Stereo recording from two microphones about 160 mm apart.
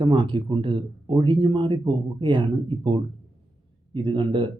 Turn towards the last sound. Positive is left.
turn(degrees=-30)  # may be behind; listen again after turning